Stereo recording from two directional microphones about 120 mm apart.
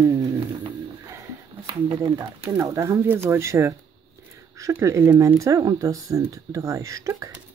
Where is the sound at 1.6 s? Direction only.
45° right (ahead or behind).